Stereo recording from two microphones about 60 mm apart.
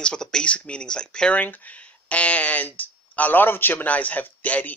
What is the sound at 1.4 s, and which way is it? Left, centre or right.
Speech, left.